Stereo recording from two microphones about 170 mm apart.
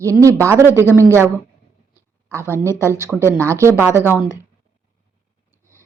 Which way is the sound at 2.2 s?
15° right (ahead or behind).